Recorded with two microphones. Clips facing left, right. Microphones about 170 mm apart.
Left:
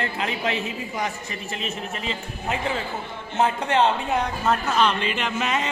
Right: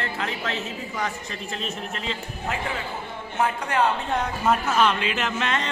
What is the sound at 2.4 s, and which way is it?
A man's voice, 20° left (ahead or behind).